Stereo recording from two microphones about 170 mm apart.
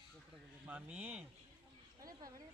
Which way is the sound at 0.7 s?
10° right (ahead or behind).